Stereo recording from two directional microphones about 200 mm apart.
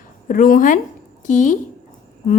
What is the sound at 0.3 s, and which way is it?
A woman's voice, 45° left (ahead or behind).